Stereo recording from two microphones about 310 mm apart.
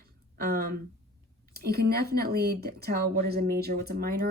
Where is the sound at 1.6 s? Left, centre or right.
Right.